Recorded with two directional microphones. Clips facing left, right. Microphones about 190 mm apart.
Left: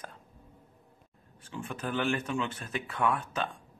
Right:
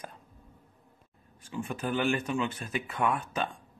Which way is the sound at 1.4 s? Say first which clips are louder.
Right 3 dB; 10° right (ahead or behind).